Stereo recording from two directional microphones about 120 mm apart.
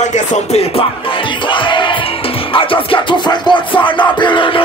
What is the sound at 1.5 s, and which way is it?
Music, 45° left (ahead or behind).